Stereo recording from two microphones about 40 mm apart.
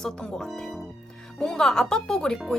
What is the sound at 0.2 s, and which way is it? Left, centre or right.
Speech, centre.